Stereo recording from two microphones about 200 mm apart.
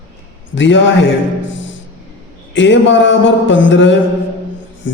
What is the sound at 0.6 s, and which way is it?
Speech, 65° left (ahead or behind).